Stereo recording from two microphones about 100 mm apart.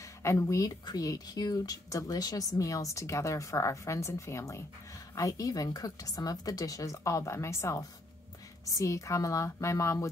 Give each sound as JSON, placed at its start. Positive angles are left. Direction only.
{"t": 0.0, "sound": "speech", "side_deg": 30}